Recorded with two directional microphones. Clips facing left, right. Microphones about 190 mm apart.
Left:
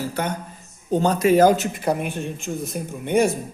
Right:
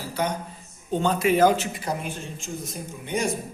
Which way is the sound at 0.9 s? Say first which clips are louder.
Left 5 dB; 40° left (ahead or behind).